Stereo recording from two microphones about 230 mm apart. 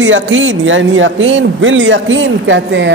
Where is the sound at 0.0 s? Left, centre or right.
Right.